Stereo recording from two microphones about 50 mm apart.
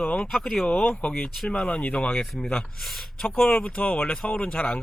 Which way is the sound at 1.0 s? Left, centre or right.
Left.